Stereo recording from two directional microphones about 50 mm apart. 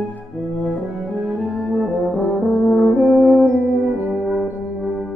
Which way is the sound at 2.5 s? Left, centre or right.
Centre.